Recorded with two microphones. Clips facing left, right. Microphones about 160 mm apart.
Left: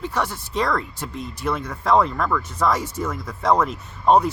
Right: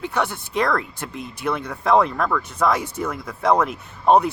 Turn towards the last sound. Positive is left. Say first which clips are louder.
# right 1 dB
turn(degrees=-60)  # may be behind; listen again after turning